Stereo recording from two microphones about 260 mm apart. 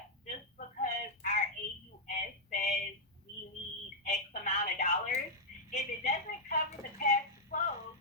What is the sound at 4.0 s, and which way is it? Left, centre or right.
Telephone, left.